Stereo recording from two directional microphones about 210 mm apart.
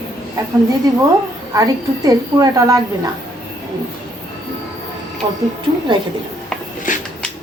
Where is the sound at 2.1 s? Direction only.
15° right (ahead or behind).